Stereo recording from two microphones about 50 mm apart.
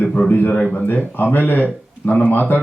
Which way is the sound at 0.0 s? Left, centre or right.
Left.